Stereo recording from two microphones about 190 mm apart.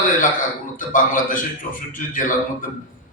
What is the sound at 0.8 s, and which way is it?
A man's voice, 45° left (ahead or behind).